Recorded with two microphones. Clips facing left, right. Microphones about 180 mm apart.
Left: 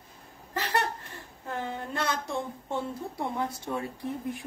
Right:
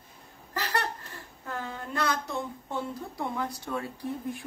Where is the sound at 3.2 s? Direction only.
20° left (ahead or behind).